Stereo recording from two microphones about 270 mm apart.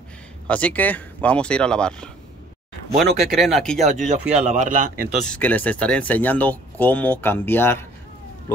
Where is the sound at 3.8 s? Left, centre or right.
Right.